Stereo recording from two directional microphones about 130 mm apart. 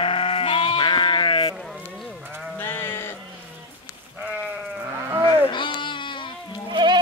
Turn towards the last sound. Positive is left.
turn(degrees=-35)  # may be behind; listen again after turning